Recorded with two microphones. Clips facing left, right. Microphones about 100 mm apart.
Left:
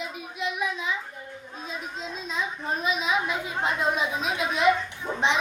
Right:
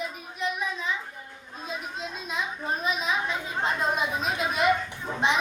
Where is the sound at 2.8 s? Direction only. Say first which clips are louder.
Left 3 dB; 5° left (ahead or behind).